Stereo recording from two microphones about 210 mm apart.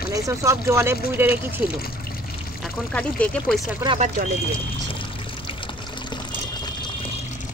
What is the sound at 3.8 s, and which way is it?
Speech, 30° right (ahead or behind).